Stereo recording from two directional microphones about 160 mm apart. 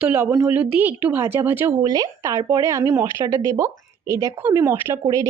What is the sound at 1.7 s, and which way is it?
Speech, 25° right (ahead or behind).